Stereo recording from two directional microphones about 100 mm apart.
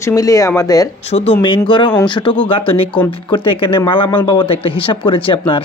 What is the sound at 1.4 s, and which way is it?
Speech, 55° left (ahead or behind).